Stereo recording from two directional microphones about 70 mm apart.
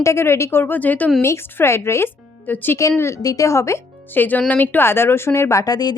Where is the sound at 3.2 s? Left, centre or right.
Left.